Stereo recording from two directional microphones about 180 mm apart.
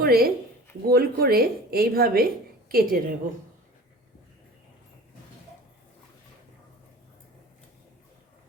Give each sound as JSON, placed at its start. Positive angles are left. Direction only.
{"t": 0.0, "sound": "a woman's voice", "side_deg": -60}